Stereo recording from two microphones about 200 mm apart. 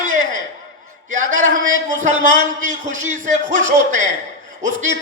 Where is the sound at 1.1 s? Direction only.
40° right (ahead or behind).